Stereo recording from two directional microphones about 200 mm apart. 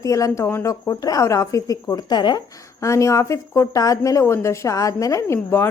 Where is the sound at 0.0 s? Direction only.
15° left (ahead or behind).